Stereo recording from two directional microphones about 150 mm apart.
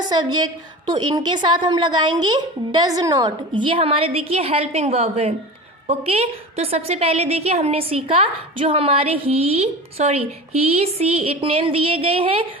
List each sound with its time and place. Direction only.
0.0 s a woman's voice: 25° right (ahead or behind)